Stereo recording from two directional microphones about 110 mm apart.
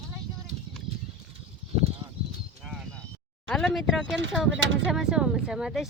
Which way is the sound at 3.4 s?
5° left (ahead or behind).